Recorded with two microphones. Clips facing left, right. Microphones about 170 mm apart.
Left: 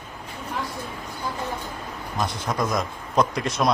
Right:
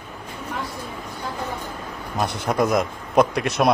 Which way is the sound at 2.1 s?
65° right (ahead or behind).